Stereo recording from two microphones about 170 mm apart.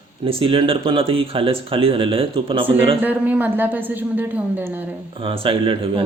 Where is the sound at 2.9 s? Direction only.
10° right (ahead or behind).